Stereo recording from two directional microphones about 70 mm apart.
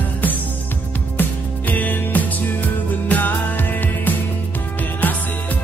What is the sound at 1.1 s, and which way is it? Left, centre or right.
Music, left.